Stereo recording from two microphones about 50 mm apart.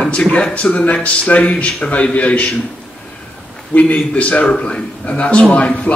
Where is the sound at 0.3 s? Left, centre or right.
Left.